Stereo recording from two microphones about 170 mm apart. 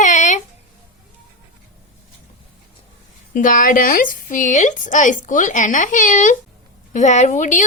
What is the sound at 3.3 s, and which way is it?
Speech, 50° left (ahead or behind).